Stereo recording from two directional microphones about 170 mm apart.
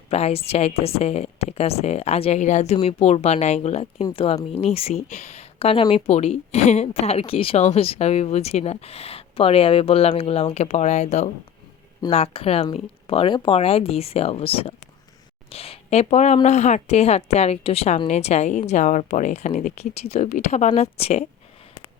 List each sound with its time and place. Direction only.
0.1 s speech: 35° left (ahead or behind)